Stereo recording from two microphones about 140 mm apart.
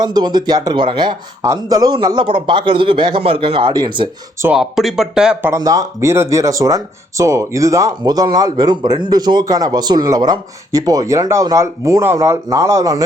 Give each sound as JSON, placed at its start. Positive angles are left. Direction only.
{"t": 0.0, "sound": "a man's voice", "side_deg": -30}
{"t": 4.4, "sound": "speech", "side_deg": -5}
{"t": 5.5, "sound": "speech", "side_deg": -25}